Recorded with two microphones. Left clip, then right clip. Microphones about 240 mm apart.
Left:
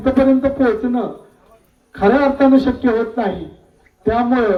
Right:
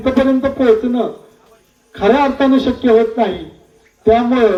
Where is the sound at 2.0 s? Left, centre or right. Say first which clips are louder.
Right 1 dB; right.